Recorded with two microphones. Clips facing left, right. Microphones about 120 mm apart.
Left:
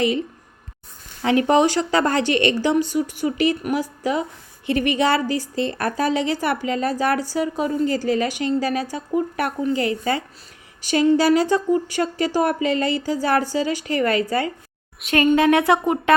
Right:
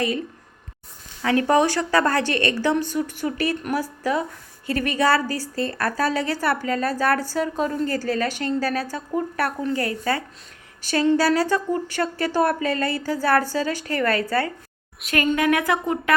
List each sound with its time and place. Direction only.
1.2 s a woman's voice: 20° left (ahead or behind)
15.1 s speech: 25° left (ahead or behind)